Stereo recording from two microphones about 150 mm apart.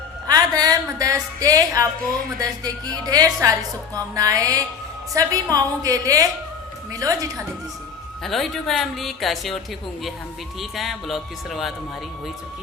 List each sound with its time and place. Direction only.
0.3 s music: 25° right (ahead or behind)
2.4 s speech: 25° right (ahead or behind)
8.2 s speech: centre (ahead or behind)
10.6 s speech: centre (ahead or behind)